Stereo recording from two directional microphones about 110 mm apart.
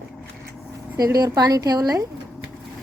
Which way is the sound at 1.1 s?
35° right (ahead or behind).